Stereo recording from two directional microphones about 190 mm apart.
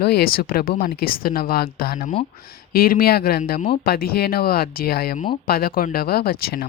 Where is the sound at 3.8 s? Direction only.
55° left (ahead or behind).